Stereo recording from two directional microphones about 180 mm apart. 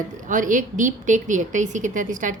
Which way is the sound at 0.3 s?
45° right (ahead or behind).